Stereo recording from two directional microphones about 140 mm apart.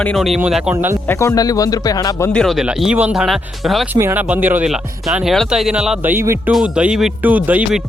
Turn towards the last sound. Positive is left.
turn(degrees=-10)  # may be behind; listen again after turning